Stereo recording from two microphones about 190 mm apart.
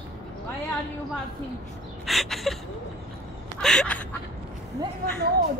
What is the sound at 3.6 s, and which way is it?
Speech, 5° left (ahead or behind).